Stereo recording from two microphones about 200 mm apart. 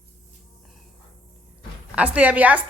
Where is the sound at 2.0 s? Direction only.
5° right (ahead or behind).